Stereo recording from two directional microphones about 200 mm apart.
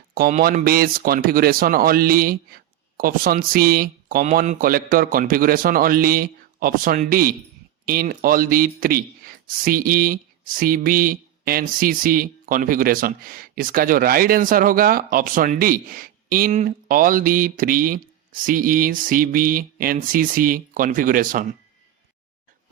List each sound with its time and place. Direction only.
0.1 s speech: 45° right (ahead or behind)